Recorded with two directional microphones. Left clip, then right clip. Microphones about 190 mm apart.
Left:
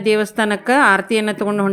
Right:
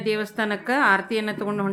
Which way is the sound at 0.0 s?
40° left (ahead or behind).